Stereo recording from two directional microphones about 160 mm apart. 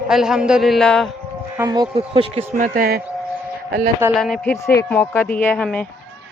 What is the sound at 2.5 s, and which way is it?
Speech, 55° right (ahead or behind).